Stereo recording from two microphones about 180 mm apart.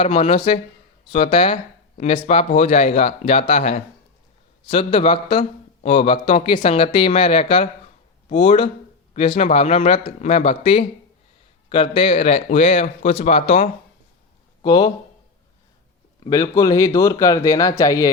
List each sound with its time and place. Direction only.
0.0 s speech: 35° left (ahead or behind)
14.6 s speech: 25° left (ahead or behind)
16.2 s speech: 20° left (ahead or behind)